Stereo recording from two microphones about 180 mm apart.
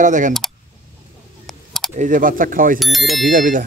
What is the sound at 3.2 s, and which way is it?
Speech, 45° right (ahead or behind).